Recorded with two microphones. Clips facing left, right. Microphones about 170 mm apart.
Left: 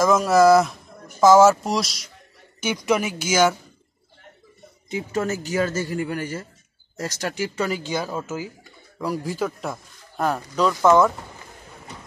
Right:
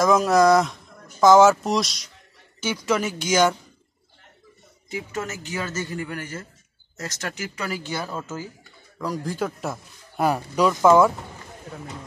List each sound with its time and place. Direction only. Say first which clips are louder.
0.0 s speech: left 1 dB; centre (ahead or behind)
2.6 s speech: left 2 dB; 15° left (ahead or behind)
4.8 s a man's voice: left 5 dB; 25° left (ahead or behind); by 11.1 s 10° right (ahead or behind)